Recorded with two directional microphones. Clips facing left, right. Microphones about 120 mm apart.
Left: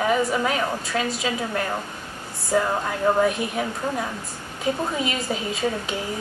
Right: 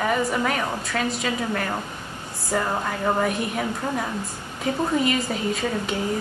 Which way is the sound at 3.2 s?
5° left (ahead or behind).